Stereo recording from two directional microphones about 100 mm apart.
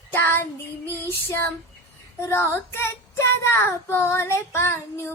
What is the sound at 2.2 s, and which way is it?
Child singing, 25° left (ahead or behind).